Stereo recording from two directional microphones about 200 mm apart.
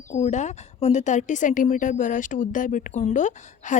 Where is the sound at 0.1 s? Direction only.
35° left (ahead or behind).